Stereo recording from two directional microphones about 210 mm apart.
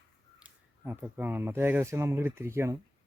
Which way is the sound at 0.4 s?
10° right (ahead or behind).